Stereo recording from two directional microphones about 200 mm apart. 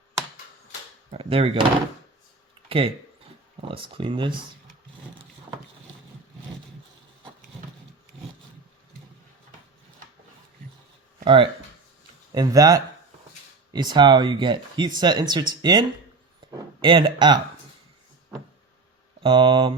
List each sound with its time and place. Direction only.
1.1 s speech: 30° right (ahead or behind)
2.6 s speech: 25° right (ahead or behind)
11.2 s a sound: 25° right (ahead or behind)
12.3 s speech: 20° right (ahead or behind)
16.5 s a sound: 25° right (ahead or behind)
19.2 s speech: 25° right (ahead or behind)